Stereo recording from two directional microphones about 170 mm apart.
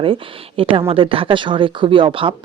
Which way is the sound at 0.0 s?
30° right (ahead or behind).